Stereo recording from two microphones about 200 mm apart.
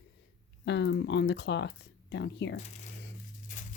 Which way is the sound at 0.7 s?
60° left (ahead or behind).